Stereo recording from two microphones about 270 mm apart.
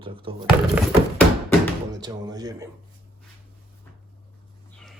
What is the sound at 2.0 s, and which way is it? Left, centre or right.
Speech, centre.